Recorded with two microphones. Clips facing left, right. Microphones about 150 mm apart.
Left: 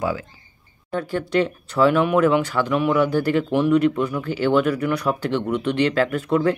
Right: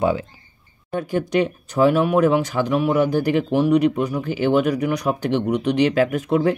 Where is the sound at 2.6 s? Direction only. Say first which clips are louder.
Right 2 dB; 40° right (ahead or behind).